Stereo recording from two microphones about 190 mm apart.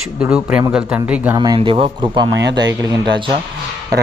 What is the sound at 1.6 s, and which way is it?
Speech, 30° right (ahead or behind).